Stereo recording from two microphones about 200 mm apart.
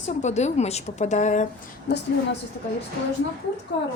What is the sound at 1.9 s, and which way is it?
Speech, 55° left (ahead or behind).